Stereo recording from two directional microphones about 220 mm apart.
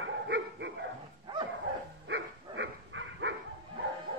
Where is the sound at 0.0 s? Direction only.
50° right (ahead or behind).